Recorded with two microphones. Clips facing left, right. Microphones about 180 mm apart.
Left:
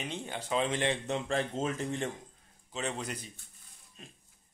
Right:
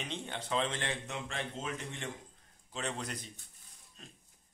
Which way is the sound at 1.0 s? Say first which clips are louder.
Left 8 dB; 35° left (ahead or behind).